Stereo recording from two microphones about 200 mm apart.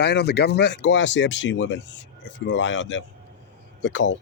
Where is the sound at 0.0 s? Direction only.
55° left (ahead or behind).